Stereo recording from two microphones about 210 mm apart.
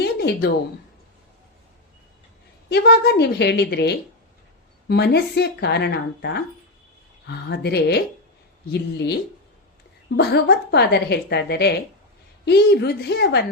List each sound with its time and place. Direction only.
0.0 s a sound: 50° left (ahead or behind)
2.6 s a woman's voice: 50° left (ahead or behind)
10.2 s a woman's voice: 50° left (ahead or behind)